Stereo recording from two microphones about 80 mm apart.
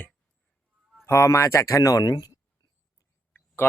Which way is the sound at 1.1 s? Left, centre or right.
Left.